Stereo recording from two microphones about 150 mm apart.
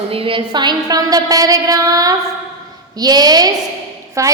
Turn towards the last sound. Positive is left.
turn(degrees=-20)  # may be behind; listen again after turning